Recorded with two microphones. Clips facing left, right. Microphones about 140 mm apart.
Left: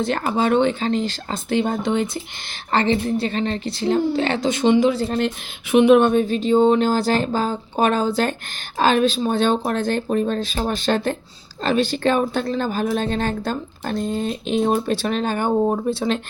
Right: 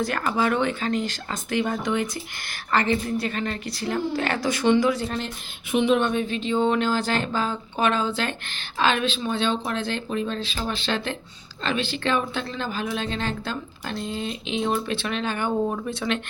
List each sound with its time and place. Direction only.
0.0 s speech: 25° left (ahead or behind)
5.7 s speech: 65° left (ahead or behind)
6.0 s a woman's voice: 45° left (ahead or behind)